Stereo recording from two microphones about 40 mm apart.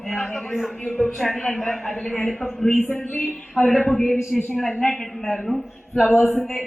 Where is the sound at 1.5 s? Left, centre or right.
Centre.